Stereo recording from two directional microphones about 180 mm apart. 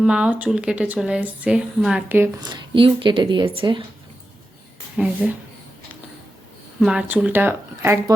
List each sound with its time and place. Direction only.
0.0 s speech: 5° right (ahead or behind)
2.4 s speech: 25° right (ahead or behind)
4.9 s speech: 10° right (ahead or behind)
6.7 s speech: 5° right (ahead or behind)